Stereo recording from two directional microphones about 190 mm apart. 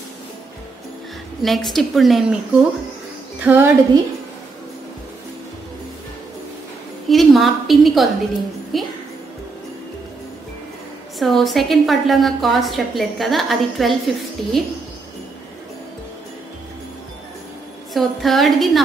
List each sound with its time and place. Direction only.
1.4 s a woman's voice: centre (ahead or behind)
3.4 s speech: 10° right (ahead or behind)
7.1 s a sound: centre (ahead or behind)
8.7 s a woman's voice: centre (ahead or behind)
11.1 s a woman's voice: centre (ahead or behind)
17.9 s a woman's voice: centre (ahead or behind)